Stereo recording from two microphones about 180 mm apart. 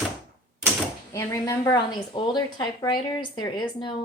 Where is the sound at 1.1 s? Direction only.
15° left (ahead or behind).